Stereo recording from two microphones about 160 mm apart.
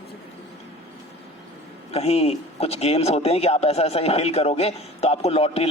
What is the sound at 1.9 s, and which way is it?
Speech, 40° left (ahead or behind).